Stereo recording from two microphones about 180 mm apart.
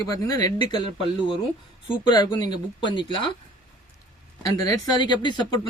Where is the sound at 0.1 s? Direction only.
20° left (ahead or behind).